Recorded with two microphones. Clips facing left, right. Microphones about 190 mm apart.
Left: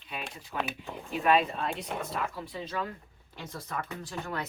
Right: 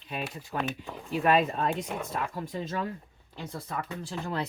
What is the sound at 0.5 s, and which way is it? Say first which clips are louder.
Speech: right 2 dB; 40° right (ahead or behind).